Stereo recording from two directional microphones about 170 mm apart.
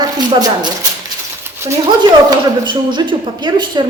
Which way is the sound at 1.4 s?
15° right (ahead or behind).